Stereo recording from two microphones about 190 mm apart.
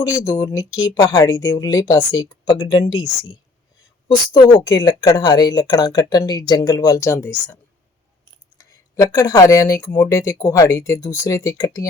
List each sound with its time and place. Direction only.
0.0 s speech: 15° left (ahead or behind)